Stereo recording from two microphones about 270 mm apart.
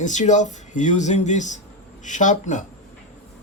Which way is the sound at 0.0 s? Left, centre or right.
Left.